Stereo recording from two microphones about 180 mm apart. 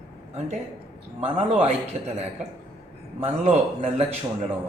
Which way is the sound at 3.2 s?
35° right (ahead or behind).